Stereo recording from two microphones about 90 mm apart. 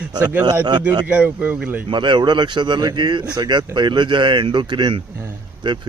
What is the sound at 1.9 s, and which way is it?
Speech, 60° right (ahead or behind).